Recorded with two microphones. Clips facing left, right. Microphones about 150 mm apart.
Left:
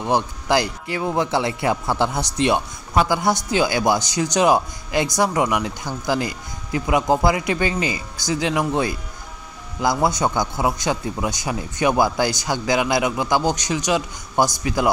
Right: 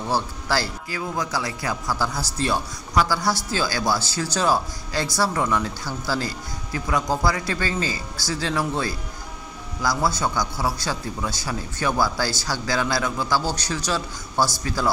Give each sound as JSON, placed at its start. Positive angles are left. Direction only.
{"t": 0.0, "sound": "speech", "side_deg": 20}